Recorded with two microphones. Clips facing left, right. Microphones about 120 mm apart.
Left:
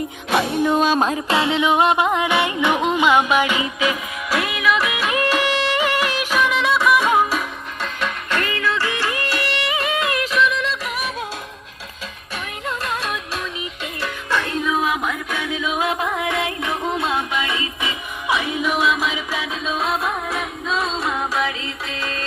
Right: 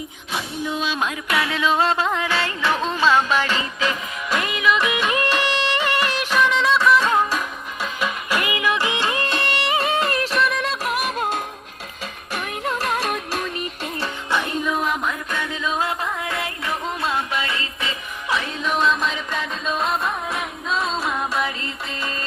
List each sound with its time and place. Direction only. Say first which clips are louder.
0.3 s music: left 9 dB; 65° left (ahead or behind); by 7.4 s 10° left (ahead or behind)
7.8 s music: even; 5° right (ahead or behind); by 11.4 s 50° right (ahead or behind)
13.0 s music: right 2 dB; 50° right (ahead or behind)
14.3 s music: left 1 dB; 15° right (ahead or behind)
14.5 s music: left 2 dB; centre (ahead or behind)